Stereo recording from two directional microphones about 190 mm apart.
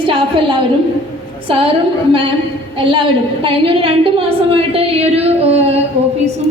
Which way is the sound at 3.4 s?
30° right (ahead or behind).